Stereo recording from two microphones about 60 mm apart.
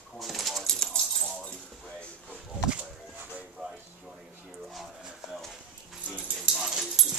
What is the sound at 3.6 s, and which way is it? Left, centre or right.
Speech, centre.